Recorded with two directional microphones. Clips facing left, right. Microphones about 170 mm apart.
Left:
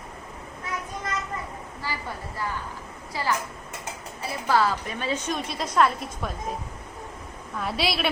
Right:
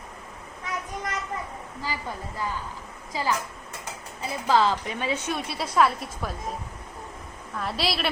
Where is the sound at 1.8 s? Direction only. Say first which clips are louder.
Right 1 dB; 15° right (ahead or behind).